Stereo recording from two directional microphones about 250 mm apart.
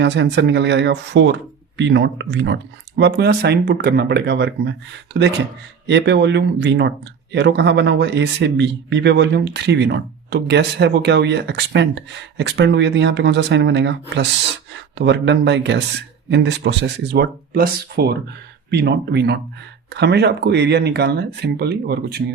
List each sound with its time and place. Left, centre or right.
0.0 s a man's voice: right